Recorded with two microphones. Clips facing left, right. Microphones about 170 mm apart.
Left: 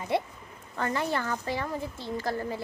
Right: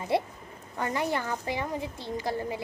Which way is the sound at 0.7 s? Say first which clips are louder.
Even; 15° right (ahead or behind).